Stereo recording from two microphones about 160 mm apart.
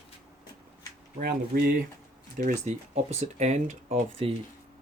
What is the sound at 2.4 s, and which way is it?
Speech, 45° right (ahead or behind).